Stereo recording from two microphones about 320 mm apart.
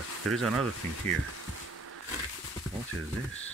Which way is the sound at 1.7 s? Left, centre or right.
Right.